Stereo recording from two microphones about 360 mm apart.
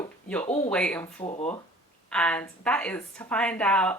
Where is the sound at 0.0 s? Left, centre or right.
Centre.